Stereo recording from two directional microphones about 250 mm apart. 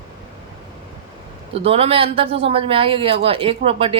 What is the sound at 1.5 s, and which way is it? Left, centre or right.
Speech, right.